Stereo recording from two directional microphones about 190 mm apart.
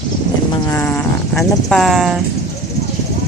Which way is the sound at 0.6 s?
10° left (ahead or behind).